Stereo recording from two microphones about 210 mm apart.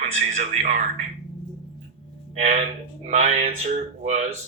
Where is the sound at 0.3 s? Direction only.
35° right (ahead or behind).